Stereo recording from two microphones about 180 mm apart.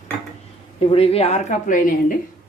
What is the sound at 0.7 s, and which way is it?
A woman's voice, 30° left (ahead or behind).